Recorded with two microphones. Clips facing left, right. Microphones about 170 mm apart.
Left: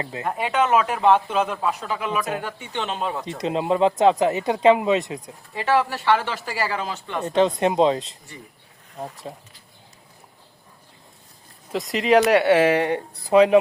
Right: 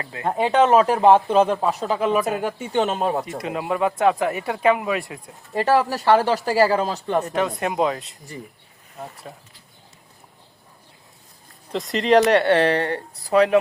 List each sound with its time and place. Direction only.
0.2 s speech: 30° right (ahead or behind)
3.4 s speech: 25° left (ahead or behind)
5.5 s speech: 40° right (ahead or behind)
7.3 s speech: 25° left (ahead or behind)
9.3 s speech: 20° left (ahead or behind)
11.7 s speech: 5° left (ahead or behind)